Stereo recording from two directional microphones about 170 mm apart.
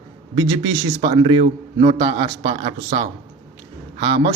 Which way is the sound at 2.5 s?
40° right (ahead or behind).